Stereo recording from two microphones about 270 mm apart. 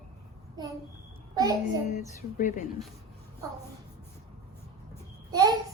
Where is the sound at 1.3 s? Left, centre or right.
Centre.